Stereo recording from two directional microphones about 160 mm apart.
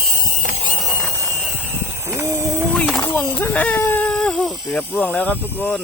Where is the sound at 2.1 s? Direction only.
15° right (ahead or behind).